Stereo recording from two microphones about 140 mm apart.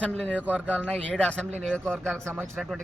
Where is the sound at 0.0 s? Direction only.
10° left (ahead or behind).